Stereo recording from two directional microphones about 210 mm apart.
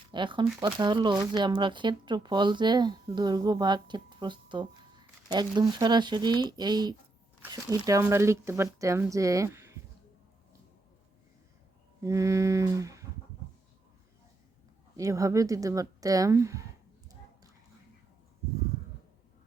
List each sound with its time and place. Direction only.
0.1 s speech: 20° right (ahead or behind)
12.0 s speech: 15° right (ahead or behind)
14.9 s speech: 15° right (ahead or behind)